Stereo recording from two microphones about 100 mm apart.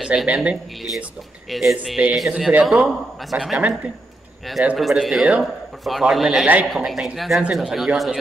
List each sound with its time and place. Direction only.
0.0 s a man's voice: 5° right (ahead or behind)
4.7 s a man's voice: centre (ahead or behind)
6.4 s speech: 15° right (ahead or behind)
6.7 s a man's voice: 5° right (ahead or behind)